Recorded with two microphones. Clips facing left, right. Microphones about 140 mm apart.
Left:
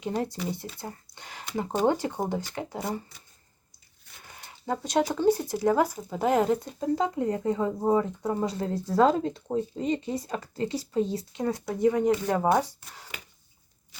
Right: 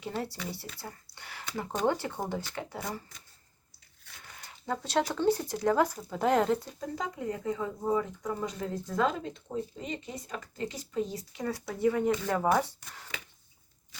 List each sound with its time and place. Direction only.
0.0 s speech: 20° left (ahead or behind)
4.4 s speech: 20° left (ahead or behind)
6.7 s speech: 30° left (ahead or behind); by 13.1 s 10° left (ahead or behind)